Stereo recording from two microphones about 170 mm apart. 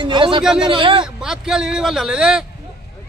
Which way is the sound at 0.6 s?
30° right (ahead or behind).